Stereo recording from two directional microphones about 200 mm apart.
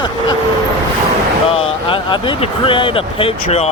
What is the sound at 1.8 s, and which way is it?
Speech, 25° left (ahead or behind).